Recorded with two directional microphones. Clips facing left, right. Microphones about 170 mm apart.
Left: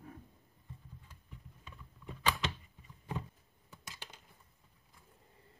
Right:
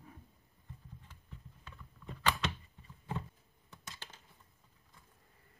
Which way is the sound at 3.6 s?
10° left (ahead or behind).